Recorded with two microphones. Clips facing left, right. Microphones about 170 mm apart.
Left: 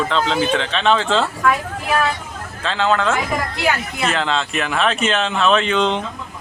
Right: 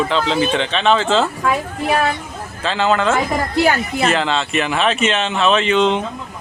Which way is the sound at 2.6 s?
5° right (ahead or behind).